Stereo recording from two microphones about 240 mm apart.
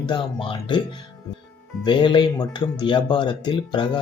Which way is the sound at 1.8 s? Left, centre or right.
Centre.